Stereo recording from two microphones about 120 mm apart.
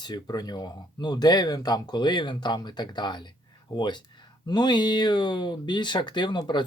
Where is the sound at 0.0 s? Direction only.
35° left (ahead or behind).